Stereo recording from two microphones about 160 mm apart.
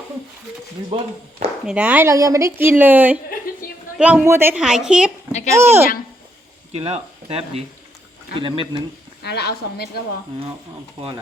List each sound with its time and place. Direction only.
0.9 s speech: 35° right (ahead or behind)
1.6 s speech: 10° right (ahead or behind)
5.5 s speech: 15° right (ahead or behind)
6.7 s speech: 40° right (ahead or behind)
9.2 s a woman's voice: 90° left